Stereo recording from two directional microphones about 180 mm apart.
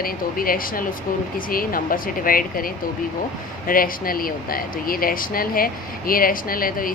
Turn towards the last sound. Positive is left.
turn(degrees=50)  # may be behind; listen again after turning